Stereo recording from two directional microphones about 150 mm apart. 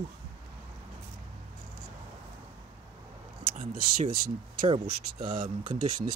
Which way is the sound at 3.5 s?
65° right (ahead or behind).